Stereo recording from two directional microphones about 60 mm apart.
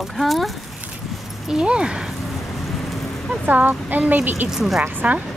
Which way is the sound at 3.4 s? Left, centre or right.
Right.